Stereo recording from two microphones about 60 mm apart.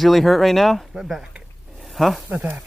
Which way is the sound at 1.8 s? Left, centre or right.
Centre.